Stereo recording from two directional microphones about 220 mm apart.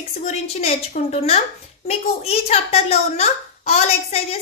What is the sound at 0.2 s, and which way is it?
A woman's voice, 30° left (ahead or behind).